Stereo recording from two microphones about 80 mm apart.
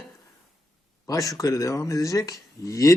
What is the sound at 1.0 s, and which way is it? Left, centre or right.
Speech, left.